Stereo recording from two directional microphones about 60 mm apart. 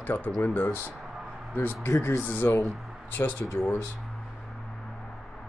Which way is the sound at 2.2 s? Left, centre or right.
Left.